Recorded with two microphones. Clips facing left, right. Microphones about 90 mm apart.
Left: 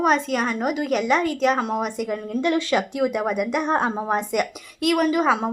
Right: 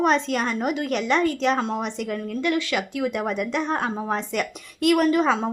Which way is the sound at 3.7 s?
20° left (ahead or behind).